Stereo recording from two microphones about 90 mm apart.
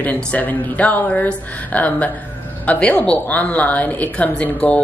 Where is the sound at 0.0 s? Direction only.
20° left (ahead or behind).